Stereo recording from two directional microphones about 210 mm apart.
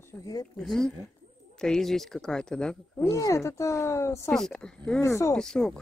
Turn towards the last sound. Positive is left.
turn(degrees=5)  # may be behind; listen again after turning